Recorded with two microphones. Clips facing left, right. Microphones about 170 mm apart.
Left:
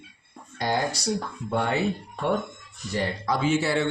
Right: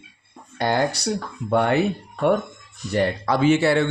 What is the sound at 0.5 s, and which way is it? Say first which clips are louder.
Speech: right 5 dB; 65° right (ahead or behind).